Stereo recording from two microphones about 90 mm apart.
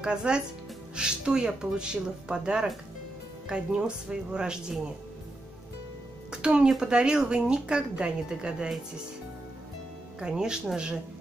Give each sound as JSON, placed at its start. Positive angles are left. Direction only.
{"t": 0.0, "sound": "a woman's voice", "side_deg": -10}
{"t": 6.3, "sound": "a woman's voice", "side_deg": -10}
{"t": 10.2, "sound": "a woman's voice", "side_deg": -10}